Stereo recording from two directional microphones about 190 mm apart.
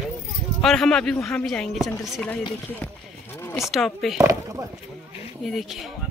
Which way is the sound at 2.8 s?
10° left (ahead or behind).